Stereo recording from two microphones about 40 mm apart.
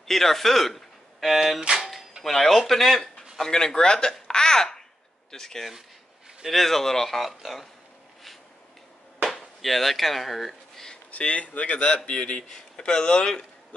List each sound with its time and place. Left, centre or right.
0.0 s speech: centre
1.2 s speech: centre
1.8 s a sound: centre
2.2 s speech: centre
3.3 s speech: centre
4.1 s babbling: centre
5.3 s speech: centre
9.3 s speech: centre
11.1 s speech: left
12.2 s speech: left